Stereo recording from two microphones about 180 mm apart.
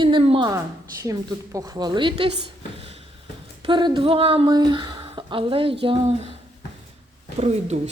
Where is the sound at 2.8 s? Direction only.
35° right (ahead or behind).